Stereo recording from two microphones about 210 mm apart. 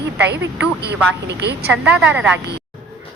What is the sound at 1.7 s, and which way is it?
Speech, 5° right (ahead or behind).